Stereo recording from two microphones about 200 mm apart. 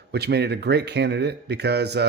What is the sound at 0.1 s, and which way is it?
A man's voice, 55° right (ahead or behind).